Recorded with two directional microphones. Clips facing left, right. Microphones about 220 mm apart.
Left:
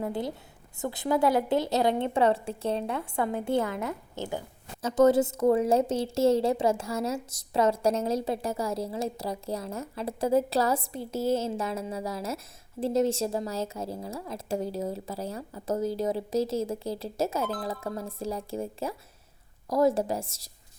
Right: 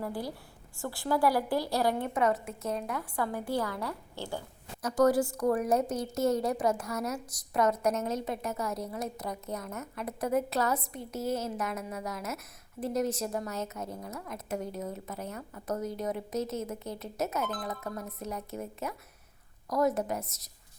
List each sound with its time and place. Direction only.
0.0 s a woman's voice: 20° left (ahead or behind)